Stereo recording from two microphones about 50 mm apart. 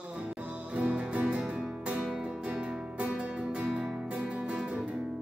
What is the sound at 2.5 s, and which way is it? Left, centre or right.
Music, centre.